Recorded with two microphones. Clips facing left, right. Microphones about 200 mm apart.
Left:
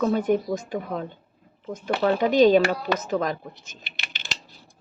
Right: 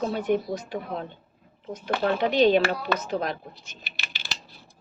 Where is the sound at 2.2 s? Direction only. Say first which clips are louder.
Left 3 dB; 45° left (ahead or behind).